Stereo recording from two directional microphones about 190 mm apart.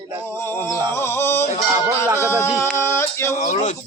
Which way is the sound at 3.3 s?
40° left (ahead or behind).